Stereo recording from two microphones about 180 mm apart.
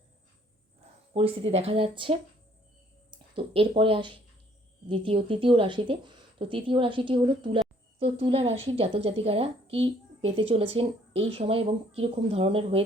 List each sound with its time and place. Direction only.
1.1 s a woman's voice: 35° right (ahead or behind)